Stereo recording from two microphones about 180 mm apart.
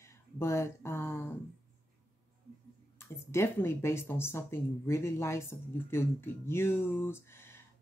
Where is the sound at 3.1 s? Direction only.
15° left (ahead or behind).